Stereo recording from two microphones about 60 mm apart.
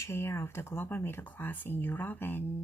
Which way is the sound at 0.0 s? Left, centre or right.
Left.